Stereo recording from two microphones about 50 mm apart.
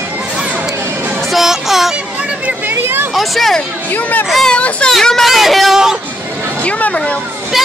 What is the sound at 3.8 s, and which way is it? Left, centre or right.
Speech, left.